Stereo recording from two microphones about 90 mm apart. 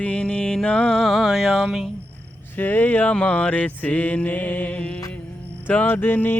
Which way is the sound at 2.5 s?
20° left (ahead or behind).